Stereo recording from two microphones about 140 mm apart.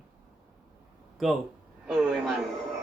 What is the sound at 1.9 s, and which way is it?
Speech, centre (ahead or behind).